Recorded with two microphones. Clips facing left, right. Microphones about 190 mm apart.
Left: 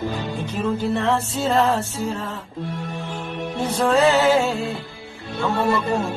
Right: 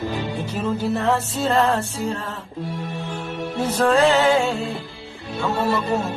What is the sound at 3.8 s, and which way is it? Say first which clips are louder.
Music: even; centre (ahead or behind).